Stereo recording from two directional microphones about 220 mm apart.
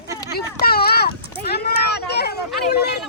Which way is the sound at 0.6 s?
45° left (ahead or behind).